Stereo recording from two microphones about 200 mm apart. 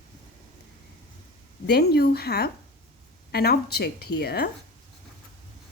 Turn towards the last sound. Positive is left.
turn(degrees=55)  # may be behind; listen again after turning